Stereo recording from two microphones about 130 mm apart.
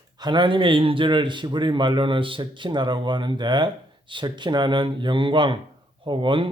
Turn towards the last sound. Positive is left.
turn(degrees=-40)  # may be behind; listen again after turning